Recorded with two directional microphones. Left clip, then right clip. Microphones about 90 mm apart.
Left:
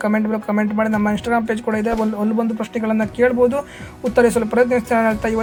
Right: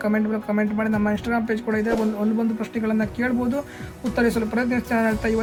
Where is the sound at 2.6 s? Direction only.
35° left (ahead or behind).